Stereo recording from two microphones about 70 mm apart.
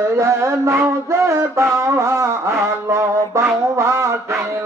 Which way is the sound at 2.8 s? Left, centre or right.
Right.